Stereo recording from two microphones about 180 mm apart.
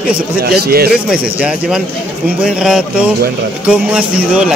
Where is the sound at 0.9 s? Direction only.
5° right (ahead or behind).